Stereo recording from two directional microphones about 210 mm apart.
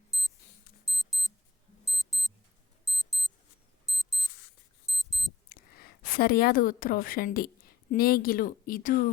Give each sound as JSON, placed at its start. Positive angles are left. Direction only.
{"t": 0.1, "sound": "alarm clock", "side_deg": 0}
{"t": 3.9, "sound": "a sound", "side_deg": 0}
{"t": 4.9, "sound": "alarm clock", "side_deg": 0}
{"t": 5.5, "sound": "a woman's voice", "side_deg": 45}